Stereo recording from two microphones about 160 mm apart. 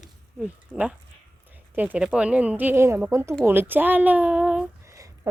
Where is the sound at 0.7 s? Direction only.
Centre (ahead or behind).